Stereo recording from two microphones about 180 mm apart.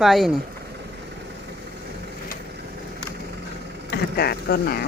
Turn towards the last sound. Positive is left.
turn(degrees=60)  # may be behind; listen again after turning